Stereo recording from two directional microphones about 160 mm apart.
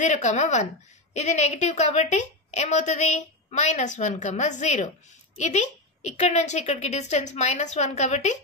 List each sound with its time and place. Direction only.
0.0 s a woman's voice: 50° left (ahead or behind)